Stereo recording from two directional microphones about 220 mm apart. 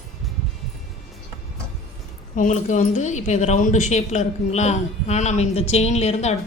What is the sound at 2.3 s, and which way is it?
A woman's voice, 35° left (ahead or behind).